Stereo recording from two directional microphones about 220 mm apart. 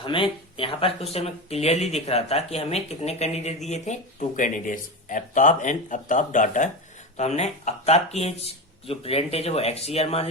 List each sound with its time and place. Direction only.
0.0 s speech: 25° left (ahead or behind)